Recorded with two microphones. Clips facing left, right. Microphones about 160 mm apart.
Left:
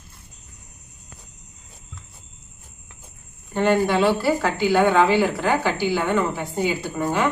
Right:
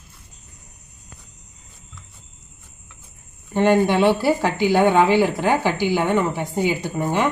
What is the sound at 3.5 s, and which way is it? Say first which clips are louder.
Speech: right 2 dB; 15° right (ahead or behind).